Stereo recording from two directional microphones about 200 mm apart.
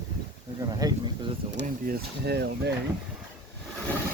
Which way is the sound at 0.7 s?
20° right (ahead or behind).